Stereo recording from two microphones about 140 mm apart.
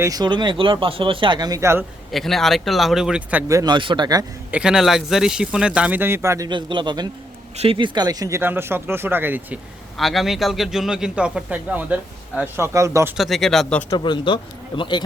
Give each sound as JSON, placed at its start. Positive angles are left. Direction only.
{"t": 0.0, "sound": "speech", "side_deg": -30}
{"t": 2.1, "sound": "speech", "side_deg": 0}
{"t": 3.5, "sound": "speech", "side_deg": -30}
{"t": 4.5, "sound": "speech", "side_deg": -5}
{"t": 6.5, "sound": "speech", "side_deg": -35}
{"t": 7.5, "sound": "speech", "side_deg": -45}
{"t": 8.4, "sound": "speech", "side_deg": -15}
{"t": 10.0, "sound": "speech", "side_deg": 0}
{"t": 13.1, "sound": "speech", "side_deg": 0}
{"t": 13.9, "sound": "speech", "side_deg": 35}